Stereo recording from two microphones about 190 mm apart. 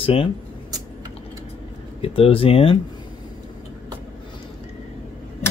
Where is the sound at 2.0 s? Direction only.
30° left (ahead or behind).